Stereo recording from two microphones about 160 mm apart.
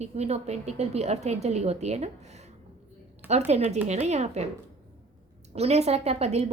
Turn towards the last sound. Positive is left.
turn(degrees=-40)  # may be behind; listen again after turning